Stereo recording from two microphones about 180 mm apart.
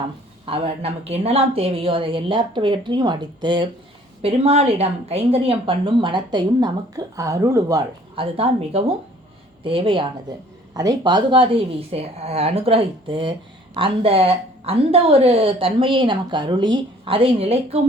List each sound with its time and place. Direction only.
0.4 s a woman's voice: 30° right (ahead or behind)
8.1 s a woman's voice: 30° right (ahead or behind)